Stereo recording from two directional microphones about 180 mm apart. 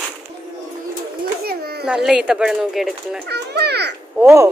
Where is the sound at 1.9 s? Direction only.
5° right (ahead or behind).